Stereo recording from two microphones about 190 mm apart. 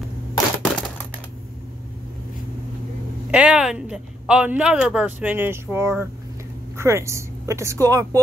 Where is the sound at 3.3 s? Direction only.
5° right (ahead or behind).